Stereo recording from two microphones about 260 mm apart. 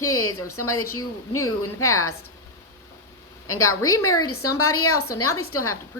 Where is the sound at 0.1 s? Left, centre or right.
Left.